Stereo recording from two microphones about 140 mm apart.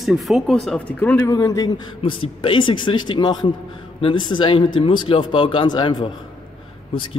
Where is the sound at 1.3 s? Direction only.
25° left (ahead or behind).